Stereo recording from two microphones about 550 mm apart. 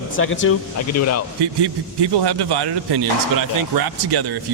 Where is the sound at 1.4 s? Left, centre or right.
Right.